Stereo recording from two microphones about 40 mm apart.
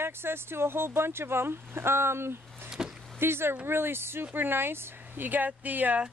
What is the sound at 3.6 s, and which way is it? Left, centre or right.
Speech, right.